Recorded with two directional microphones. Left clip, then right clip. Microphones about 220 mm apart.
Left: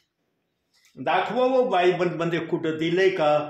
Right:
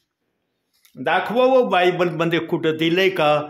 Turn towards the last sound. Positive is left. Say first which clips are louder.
# right 3 dB
turn(degrees=-40)  # may be behind; listen again after turning